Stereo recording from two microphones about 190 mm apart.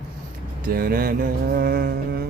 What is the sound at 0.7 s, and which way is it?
Mantra, 50° right (ahead or behind).